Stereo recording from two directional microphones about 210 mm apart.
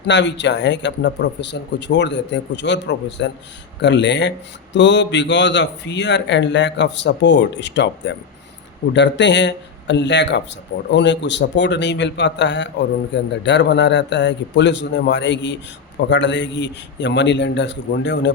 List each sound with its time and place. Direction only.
0.0 s a man's voice: 55° left (ahead or behind)